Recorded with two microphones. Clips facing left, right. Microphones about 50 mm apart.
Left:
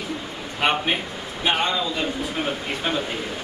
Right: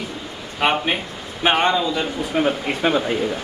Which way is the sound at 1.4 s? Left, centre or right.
Right.